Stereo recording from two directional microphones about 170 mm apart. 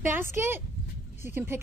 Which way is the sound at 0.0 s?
15° right (ahead or behind).